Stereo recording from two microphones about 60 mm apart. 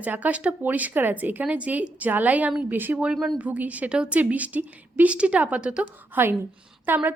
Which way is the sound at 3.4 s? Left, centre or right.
Right.